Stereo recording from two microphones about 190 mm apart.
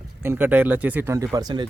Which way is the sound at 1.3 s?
20° right (ahead or behind).